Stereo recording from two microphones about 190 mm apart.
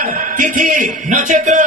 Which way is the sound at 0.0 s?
40° right (ahead or behind).